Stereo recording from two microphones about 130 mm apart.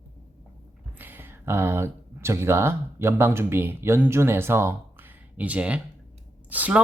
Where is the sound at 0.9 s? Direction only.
15° right (ahead or behind).